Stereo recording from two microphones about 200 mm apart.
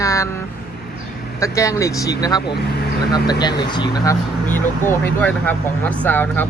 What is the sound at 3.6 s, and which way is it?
Speech, 20° left (ahead or behind).